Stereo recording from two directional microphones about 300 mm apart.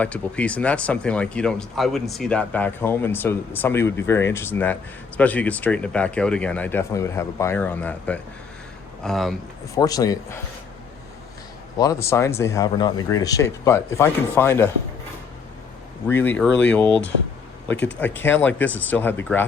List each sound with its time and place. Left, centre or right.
0.0 s speech: centre
9.7 s speech: centre
11.8 s speech: centre
16.0 s speech: centre
17.7 s speech: left
18.0 s speech: centre